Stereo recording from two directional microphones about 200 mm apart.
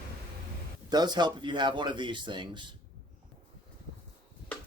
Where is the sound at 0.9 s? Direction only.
20° right (ahead or behind).